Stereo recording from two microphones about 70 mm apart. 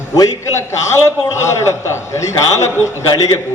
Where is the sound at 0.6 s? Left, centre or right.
Left.